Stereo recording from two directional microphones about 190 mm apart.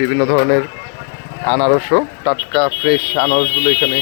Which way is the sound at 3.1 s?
25° left (ahead or behind).